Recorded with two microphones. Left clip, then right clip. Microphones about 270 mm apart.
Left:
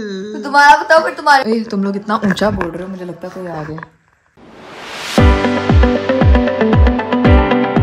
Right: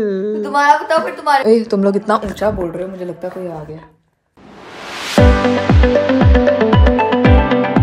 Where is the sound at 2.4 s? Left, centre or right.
Left.